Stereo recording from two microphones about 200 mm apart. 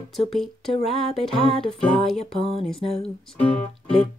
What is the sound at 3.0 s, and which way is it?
Speech, 30° left (ahead or behind).